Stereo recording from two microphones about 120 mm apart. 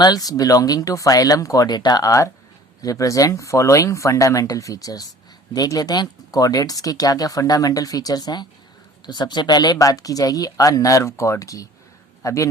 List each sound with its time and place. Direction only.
0.0 s a man's voice: 30° left (ahead or behind)